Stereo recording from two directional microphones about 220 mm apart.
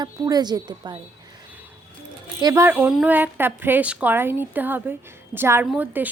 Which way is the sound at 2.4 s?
15° right (ahead or behind).